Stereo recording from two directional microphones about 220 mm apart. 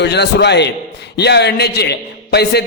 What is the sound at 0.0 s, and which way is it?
A man's voice, 50° left (ahead or behind).